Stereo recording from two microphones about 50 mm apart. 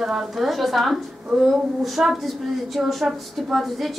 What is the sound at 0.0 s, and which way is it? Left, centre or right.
A woman's voice, centre.